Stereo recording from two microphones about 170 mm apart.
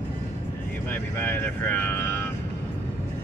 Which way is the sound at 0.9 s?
10° left (ahead or behind).